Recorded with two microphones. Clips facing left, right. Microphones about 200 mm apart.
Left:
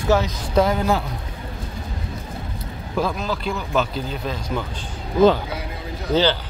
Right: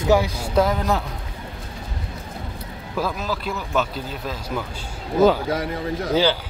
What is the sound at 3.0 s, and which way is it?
Speech, centre (ahead or behind).